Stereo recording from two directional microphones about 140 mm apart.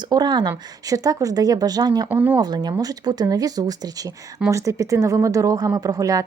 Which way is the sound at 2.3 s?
30° right (ahead or behind).